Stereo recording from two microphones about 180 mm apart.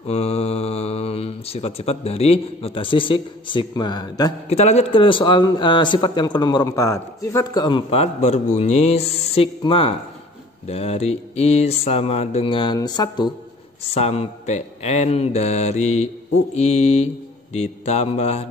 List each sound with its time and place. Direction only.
0.0 s speech: 35° left (ahead or behind)
4.5 s a man's voice: 35° left (ahead or behind)
13.8 s speech: 35° left (ahead or behind)